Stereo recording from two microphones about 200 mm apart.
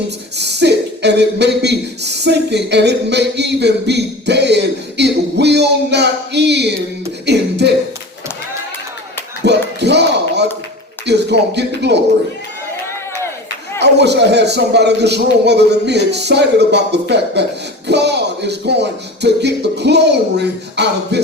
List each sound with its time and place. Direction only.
0.3 s a man's voice: 55° right (ahead or behind)
9.4 s a sound: 55° right (ahead or behind)
11.0 s a man's voice: 60° right (ahead or behind)
13.7 s a man's voice: 55° right (ahead or behind)